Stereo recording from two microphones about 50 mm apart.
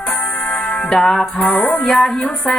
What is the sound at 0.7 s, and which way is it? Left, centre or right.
Music, centre.